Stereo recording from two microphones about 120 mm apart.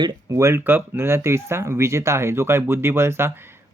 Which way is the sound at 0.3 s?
20° right (ahead or behind).